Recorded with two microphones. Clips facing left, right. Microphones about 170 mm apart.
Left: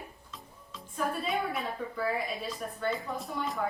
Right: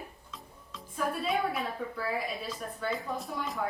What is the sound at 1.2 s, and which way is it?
Speech, centre (ahead or behind).